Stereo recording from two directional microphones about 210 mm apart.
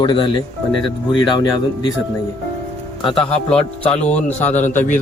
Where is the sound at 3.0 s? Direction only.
25° left (ahead or behind).